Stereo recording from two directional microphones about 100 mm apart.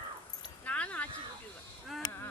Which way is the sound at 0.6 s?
15° left (ahead or behind).